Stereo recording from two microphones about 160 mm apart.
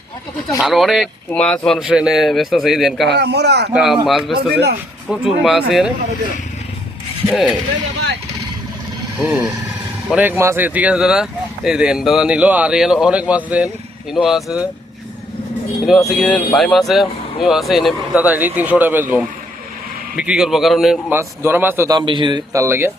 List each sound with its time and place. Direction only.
0.6 s a man's voice: centre (ahead or behind)
3.1 s speech: 90° right
3.7 s a man's voice: 5° right (ahead or behind)
7.3 s a man's voice: centre (ahead or behind)
9.1 s a man's voice: 5° right (ahead or behind)
15.9 s a man's voice: centre (ahead or behind)
21.1 s speech: 15° right (ahead or behind)
21.8 s speech: 30° right (ahead or behind)